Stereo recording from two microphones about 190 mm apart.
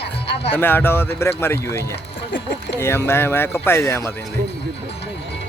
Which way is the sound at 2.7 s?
15° left (ahead or behind).